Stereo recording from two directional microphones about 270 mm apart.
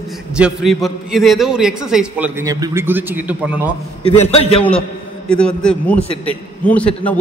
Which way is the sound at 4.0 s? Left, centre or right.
Left.